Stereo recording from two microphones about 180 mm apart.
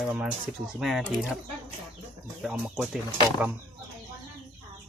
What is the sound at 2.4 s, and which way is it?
Speech, 5° right (ahead or behind).